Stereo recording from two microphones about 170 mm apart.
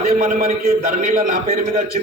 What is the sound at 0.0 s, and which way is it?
A man's voice, 60° right (ahead or behind).